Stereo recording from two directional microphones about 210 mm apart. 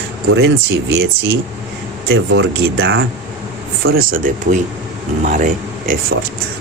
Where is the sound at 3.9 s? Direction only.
40° right (ahead or behind).